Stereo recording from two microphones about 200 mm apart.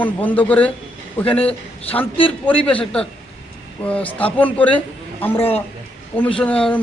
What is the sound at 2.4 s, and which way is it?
A man's voice, 5° left (ahead or behind).